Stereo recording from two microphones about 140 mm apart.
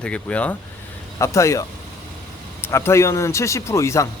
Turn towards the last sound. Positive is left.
turn(degrees=20)  # may be behind; listen again after turning